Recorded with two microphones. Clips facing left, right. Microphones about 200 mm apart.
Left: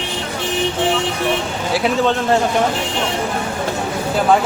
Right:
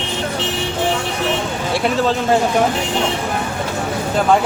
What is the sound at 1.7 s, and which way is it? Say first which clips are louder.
Speech: left 1 dB; centre (ahead or behind).